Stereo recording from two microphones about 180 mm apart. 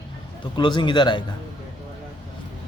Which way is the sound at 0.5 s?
25° left (ahead or behind).